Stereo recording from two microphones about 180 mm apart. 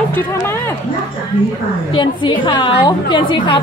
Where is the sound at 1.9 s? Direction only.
25° left (ahead or behind).